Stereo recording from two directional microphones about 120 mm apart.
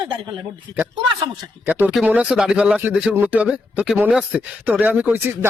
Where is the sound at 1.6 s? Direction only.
15° right (ahead or behind).